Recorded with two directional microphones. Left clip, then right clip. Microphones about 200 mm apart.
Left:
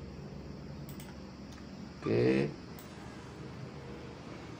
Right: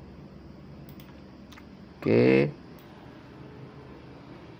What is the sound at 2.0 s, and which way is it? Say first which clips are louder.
Speech: right 8 dB; 45° right (ahead or behind).